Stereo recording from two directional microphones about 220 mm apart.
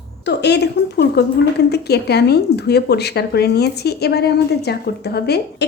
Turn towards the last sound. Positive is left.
turn(degrees=45)  # may be behind; listen again after turning